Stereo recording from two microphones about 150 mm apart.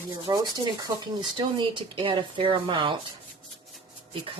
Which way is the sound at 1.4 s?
30° right (ahead or behind).